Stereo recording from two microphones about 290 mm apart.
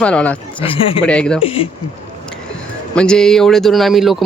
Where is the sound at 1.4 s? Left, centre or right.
Centre.